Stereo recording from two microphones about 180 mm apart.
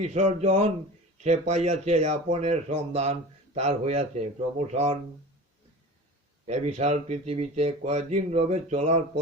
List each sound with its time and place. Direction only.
0.0 s speech: 35° right (ahead or behind)
6.4 s speech: 40° right (ahead or behind)